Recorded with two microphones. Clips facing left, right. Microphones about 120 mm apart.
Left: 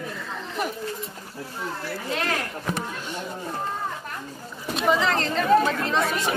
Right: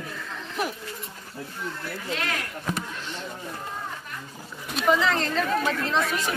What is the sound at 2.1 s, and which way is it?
Speech, 35° left (ahead or behind).